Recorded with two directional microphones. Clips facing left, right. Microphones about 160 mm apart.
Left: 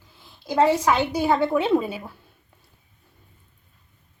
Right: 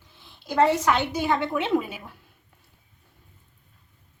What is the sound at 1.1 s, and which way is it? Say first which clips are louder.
A woman's voice: left 4 dB; 35° left (ahead or behind).